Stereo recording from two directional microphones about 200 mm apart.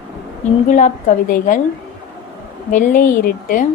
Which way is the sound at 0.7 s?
40° left (ahead or behind).